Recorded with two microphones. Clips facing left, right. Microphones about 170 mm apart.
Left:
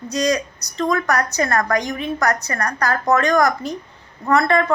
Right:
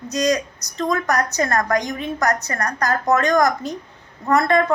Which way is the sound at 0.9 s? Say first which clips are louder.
Even; 15° right (ahead or behind).